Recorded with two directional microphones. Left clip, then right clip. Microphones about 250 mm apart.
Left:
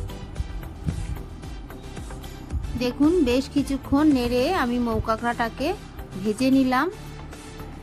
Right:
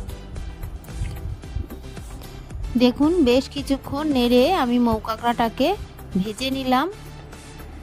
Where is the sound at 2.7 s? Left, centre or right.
Right.